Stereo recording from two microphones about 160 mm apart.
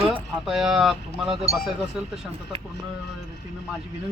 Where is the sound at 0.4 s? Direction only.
Centre (ahead or behind).